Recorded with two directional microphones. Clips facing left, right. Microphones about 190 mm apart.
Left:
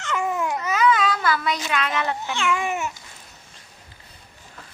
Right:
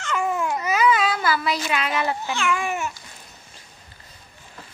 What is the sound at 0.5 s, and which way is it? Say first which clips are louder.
Baby cry: even; 10° right (ahead or behind).